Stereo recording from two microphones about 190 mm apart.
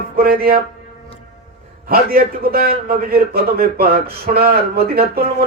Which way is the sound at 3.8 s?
55° right (ahead or behind).